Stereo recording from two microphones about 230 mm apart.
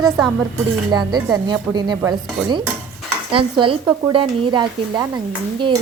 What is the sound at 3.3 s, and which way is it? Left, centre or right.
Speech, right.